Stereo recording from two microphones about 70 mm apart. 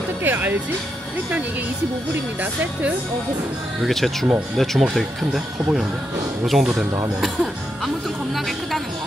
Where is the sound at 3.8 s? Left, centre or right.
Centre.